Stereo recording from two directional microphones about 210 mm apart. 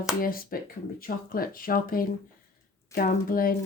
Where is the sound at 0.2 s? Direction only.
45° left (ahead or behind).